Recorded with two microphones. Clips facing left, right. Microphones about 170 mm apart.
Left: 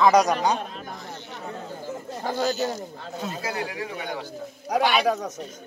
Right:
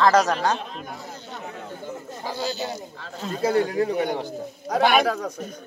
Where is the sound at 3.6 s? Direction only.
40° right (ahead or behind).